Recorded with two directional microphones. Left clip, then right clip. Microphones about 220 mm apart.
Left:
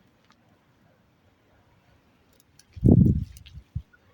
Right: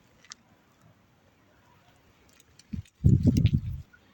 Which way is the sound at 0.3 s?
Centre (ahead or behind).